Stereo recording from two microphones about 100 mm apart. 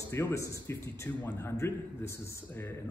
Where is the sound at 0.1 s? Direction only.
30° left (ahead or behind).